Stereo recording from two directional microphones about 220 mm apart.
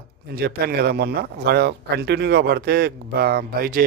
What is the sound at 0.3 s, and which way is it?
Speech, 45° right (ahead or behind).